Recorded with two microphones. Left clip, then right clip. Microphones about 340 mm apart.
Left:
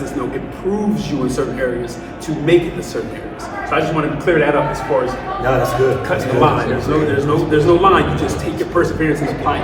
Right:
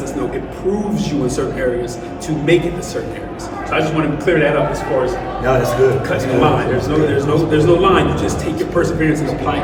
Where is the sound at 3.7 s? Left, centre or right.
Centre.